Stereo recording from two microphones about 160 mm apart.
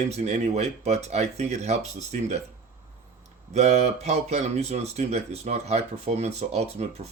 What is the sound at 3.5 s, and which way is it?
A man's voice, 45° right (ahead or behind).